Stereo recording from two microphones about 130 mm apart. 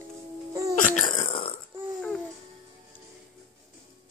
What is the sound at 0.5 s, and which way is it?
Throat clearing, 25° right (ahead or behind).